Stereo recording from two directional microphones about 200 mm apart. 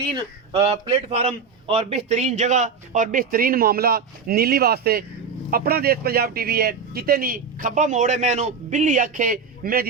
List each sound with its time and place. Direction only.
0.5 s a man's voice: 30° right (ahead or behind); by 9.8 s 45° right (ahead or behind)